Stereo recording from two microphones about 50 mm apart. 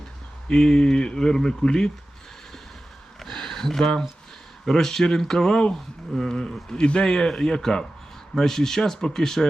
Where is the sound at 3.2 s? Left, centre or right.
Centre.